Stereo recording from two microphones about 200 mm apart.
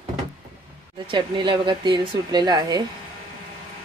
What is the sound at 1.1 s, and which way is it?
Speech, 25° right (ahead or behind).